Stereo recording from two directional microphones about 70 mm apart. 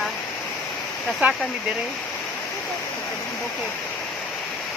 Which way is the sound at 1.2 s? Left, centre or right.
Right.